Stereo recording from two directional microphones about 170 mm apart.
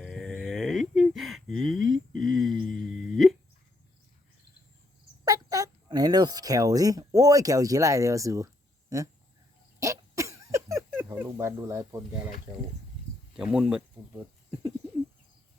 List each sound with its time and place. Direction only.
0.0 s a sound: centre (ahead or behind)
5.2 s speech: 20° right (ahead or behind)
9.8 s hiccup: 20° right (ahead or behind)
13.3 s speech: 5° right (ahead or behind)